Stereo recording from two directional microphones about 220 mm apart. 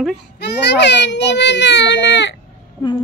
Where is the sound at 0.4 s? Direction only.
50° left (ahead or behind).